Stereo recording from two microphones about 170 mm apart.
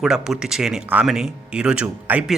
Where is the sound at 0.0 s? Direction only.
5° right (ahead or behind).